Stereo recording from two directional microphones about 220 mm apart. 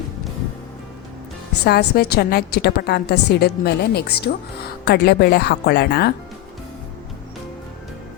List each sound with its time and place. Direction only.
1.6 s a woman's voice: 45° left (ahead or behind)